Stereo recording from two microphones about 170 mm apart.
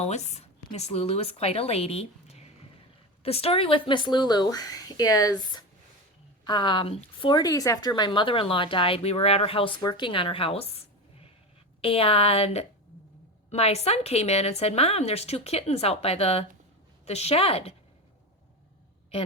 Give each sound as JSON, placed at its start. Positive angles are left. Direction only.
{"t": 0.0, "sound": "speech", "side_deg": 40}